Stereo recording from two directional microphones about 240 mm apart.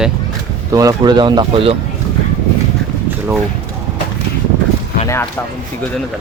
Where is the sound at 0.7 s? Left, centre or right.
Centre.